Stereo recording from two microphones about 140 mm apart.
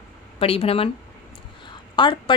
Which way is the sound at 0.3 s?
45° left (ahead or behind).